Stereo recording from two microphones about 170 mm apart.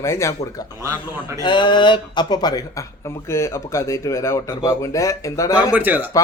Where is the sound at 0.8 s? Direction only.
15° right (ahead or behind).